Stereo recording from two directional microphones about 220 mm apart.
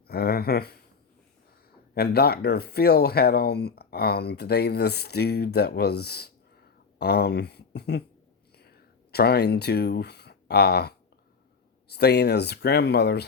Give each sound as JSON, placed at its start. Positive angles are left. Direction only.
{"t": 0.1, "sound": "speech", "side_deg": 45}
{"t": 2.0, "sound": "speech", "side_deg": 45}
{"t": 8.5, "sound": "a sound", "side_deg": 45}
{"t": 11.9, "sound": "speech", "side_deg": 45}